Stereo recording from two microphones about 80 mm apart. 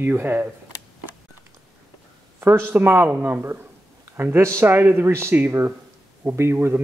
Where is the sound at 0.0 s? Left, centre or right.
Right.